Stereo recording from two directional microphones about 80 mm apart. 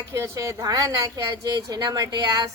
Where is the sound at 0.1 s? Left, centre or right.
Right.